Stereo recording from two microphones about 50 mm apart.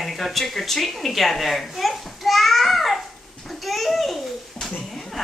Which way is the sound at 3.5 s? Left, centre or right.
Centre.